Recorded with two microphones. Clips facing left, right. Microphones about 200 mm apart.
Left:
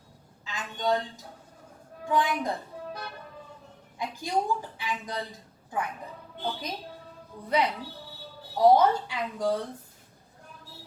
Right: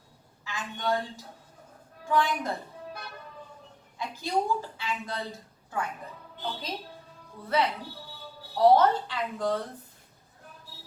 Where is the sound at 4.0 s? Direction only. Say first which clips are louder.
Even; 15° left (ahead or behind).